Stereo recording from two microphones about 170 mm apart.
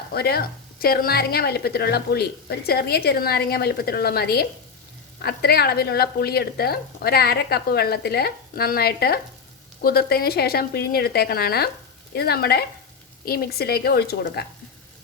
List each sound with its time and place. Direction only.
0.1 s a woman's voice: 65° left (ahead or behind)